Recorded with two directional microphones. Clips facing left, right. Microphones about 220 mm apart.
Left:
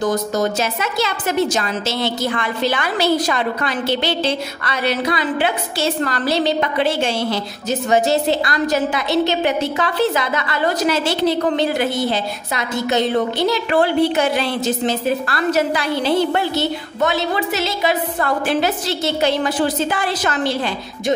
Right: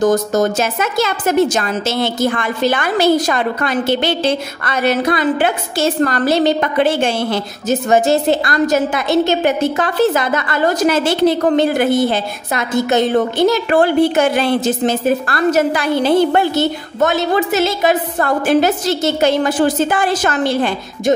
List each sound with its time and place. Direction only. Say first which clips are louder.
0.0 s a woman's voice: right 5 dB; 45° right (ahead or behind)